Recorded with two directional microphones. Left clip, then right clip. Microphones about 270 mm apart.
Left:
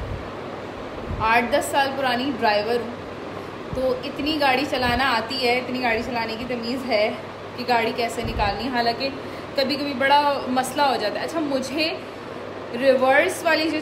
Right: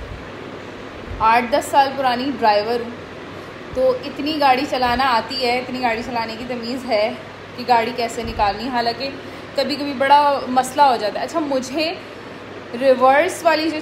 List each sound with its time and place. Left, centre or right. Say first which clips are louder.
1.2 s a woman's voice: right 4 dB; centre
3.8 s a woman's voice: right 5 dB; centre